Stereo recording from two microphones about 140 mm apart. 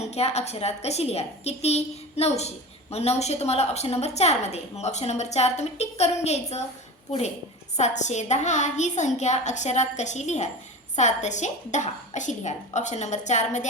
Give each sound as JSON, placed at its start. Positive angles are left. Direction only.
{"t": 0.0, "sound": "a woman's voice", "side_deg": 50}
{"t": 7.8, "sound": "a woman's voice", "side_deg": 55}